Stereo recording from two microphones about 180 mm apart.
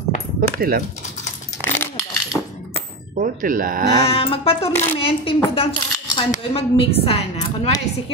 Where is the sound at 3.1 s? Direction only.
50° right (ahead or behind).